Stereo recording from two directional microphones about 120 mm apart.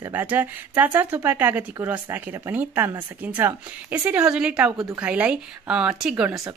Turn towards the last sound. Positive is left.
turn(degrees=-5)  # may be behind; listen again after turning